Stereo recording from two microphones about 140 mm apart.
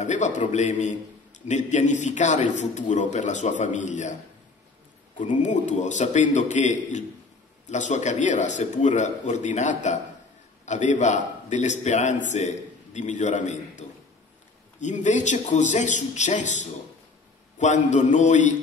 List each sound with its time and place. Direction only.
0.0 s a man's voice: 60° left (ahead or behind)
5.1 s a man's voice: 60° left (ahead or behind)